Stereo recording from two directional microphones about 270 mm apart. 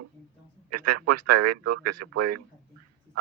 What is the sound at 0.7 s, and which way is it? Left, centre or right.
Speech, right.